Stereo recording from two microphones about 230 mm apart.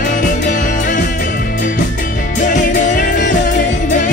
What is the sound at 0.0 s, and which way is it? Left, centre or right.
Music, left.